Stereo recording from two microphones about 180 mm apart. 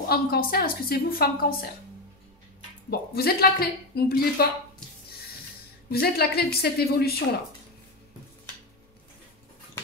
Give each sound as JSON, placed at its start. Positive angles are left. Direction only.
{"t": 0.1, "sound": "a woman's voice", "side_deg": 55}
{"t": 2.9, "sound": "a woman's voice", "side_deg": 60}
{"t": 5.9, "sound": "a woman's voice", "side_deg": 60}